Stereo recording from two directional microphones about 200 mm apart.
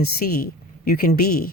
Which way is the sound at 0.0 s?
50° left (ahead or behind).